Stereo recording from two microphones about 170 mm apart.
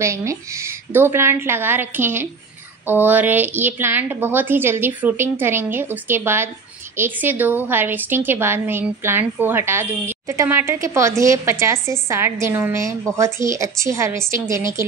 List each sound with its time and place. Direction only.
0.0 s a woman's voice: 15° right (ahead or behind)